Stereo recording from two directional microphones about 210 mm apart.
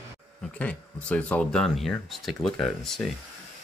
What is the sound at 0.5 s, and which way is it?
Speech, 5° left (ahead or behind).